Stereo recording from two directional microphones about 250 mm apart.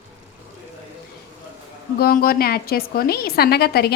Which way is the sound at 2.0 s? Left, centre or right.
Left.